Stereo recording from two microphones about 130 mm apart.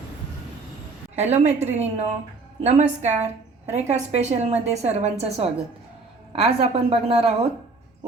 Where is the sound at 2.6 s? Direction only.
60° right (ahead or behind).